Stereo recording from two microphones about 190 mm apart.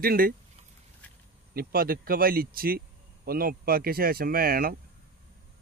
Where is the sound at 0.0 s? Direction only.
50° right (ahead or behind).